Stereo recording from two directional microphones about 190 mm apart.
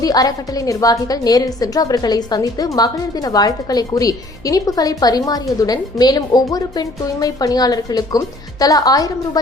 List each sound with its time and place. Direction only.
0.0 s a woman's voice: 20° left (ahead or behind)